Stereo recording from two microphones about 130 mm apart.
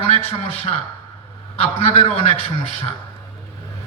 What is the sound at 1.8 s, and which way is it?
Speech, 50° left (ahead or behind).